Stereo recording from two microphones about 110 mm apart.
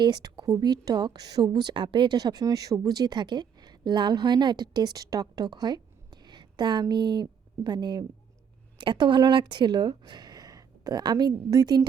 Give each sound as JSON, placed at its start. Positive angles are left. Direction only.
{"t": 0.0, "sound": "speech", "side_deg": -40}